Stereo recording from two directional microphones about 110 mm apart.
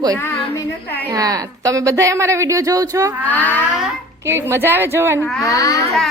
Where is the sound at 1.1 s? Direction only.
35° right (ahead or behind).